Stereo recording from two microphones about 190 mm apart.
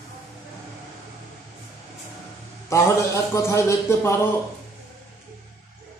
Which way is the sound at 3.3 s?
15° left (ahead or behind).